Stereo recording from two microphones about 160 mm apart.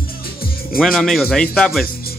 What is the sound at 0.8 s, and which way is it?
Speech, centre (ahead or behind).